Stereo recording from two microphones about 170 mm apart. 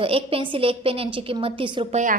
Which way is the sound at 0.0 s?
35° right (ahead or behind).